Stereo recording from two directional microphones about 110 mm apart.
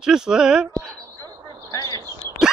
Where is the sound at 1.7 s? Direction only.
30° left (ahead or behind).